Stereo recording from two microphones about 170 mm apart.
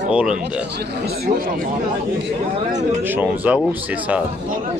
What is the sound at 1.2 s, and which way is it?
Speech, 55° right (ahead or behind).